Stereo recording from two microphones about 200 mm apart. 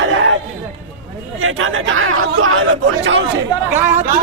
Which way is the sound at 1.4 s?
85° right.